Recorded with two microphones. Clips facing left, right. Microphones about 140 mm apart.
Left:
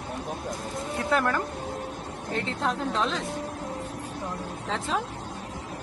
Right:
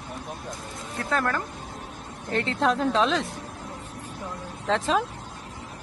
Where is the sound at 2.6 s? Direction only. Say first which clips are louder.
Right 6 dB; 90° right.